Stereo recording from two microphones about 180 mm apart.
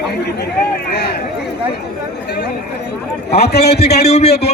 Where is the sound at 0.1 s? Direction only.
65° left (ahead or behind).